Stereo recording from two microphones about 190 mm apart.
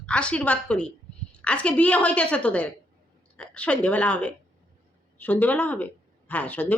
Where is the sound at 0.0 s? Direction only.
5° left (ahead or behind).